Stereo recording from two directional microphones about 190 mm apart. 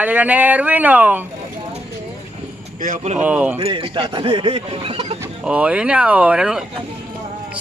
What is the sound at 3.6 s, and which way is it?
Speech, 30° right (ahead or behind).